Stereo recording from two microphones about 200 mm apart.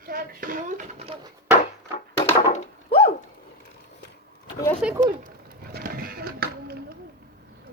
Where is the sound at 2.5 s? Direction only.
30° left (ahead or behind).